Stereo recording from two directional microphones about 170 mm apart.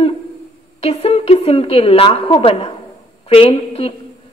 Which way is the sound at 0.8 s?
35° left (ahead or behind).